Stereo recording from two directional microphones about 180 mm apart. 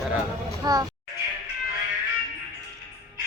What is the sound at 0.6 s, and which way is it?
Speech, 20° right (ahead or behind).